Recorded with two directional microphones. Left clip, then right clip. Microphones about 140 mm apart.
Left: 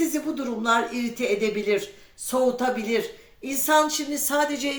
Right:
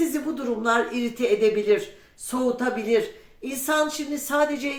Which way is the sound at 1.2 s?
15° left (ahead or behind).